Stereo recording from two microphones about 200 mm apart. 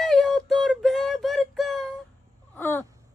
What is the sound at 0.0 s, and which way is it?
Music, centre (ahead or behind).